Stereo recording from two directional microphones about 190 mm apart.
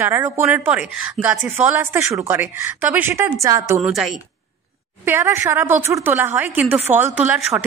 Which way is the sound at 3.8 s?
Centre (ahead or behind).